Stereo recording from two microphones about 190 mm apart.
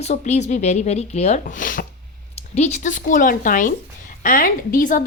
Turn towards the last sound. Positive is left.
turn(degrees=45)  # may be behind; listen again after turning